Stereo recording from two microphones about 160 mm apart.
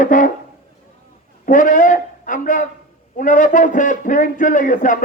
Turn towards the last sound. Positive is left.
turn(degrees=55)  # may be behind; listen again after turning